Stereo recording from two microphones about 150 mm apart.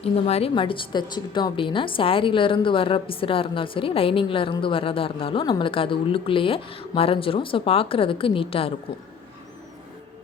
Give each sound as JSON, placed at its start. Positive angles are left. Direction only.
{"t": 0.0, "sound": "speech", "side_deg": 40}